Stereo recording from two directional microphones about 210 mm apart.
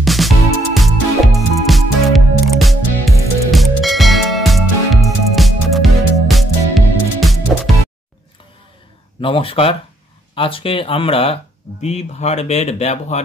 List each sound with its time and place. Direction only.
0.0 s music: centre (ahead or behind)
9.2 s speech: 25° left (ahead or behind)